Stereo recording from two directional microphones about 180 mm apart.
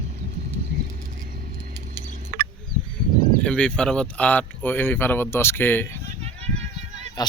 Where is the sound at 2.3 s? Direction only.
55° right (ahead or behind).